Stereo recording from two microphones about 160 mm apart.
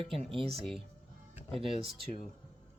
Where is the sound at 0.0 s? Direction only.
35° right (ahead or behind).